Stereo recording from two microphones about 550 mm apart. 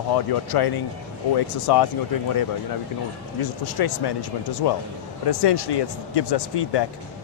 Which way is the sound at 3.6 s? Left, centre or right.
Left.